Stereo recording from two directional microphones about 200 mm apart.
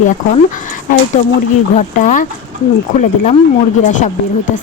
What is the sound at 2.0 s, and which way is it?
Speech, 40° left (ahead or behind).